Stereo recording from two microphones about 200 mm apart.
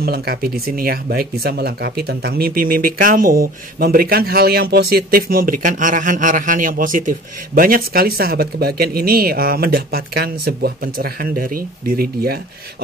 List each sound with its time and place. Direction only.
0.0 s speech: 50° right (ahead or behind)